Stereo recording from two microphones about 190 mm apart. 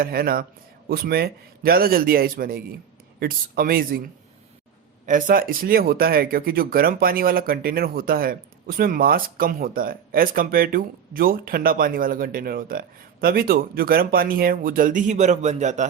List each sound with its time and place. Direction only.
0.0 s speech: 50° right (ahead or behind)
5.0 s speech: 45° right (ahead or behind)